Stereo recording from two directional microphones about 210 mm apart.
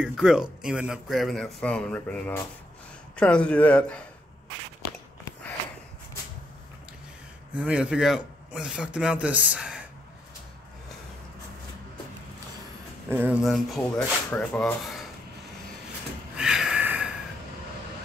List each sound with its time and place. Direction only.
0.0 s speech: 5° right (ahead or behind)
7.5 s speech: 5° right (ahead or behind)
13.1 s speech: 5° right (ahead or behind)
16.3 s a sound: 5° right (ahead or behind)